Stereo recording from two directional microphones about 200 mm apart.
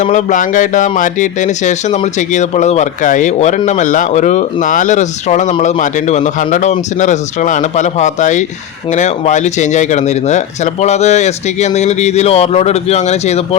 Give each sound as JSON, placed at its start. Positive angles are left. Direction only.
{"t": 0.0, "sound": "speech", "side_deg": 35}